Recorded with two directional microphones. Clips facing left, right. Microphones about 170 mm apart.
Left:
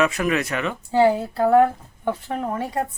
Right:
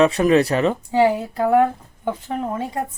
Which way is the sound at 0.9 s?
15° right (ahead or behind).